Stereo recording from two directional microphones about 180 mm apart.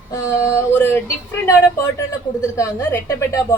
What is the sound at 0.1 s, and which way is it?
A woman's voice, 15° left (ahead or behind).